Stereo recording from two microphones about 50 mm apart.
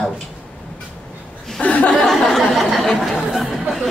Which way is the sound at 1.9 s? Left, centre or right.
Centre.